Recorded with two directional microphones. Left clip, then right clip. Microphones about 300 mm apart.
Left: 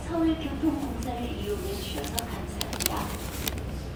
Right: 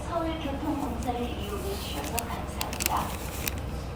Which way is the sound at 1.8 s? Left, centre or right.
Centre.